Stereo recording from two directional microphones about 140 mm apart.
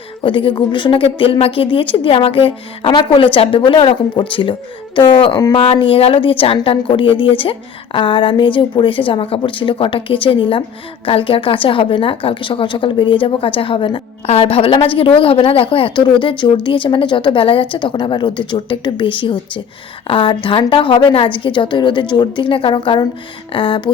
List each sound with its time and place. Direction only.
0.2 s a woman's voice: 40° left (ahead or behind)
5.5 s a woman's voice: 40° left (ahead or behind)